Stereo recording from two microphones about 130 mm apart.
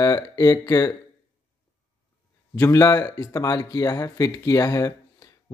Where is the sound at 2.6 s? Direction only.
25° left (ahead or behind).